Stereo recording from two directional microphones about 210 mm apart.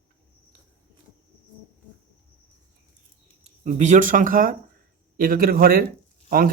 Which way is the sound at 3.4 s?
35° right (ahead or behind).